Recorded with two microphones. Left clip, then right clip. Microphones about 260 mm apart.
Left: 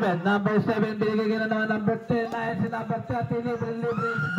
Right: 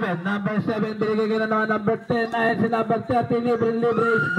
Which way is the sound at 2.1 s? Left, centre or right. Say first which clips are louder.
Right 6 dB; right.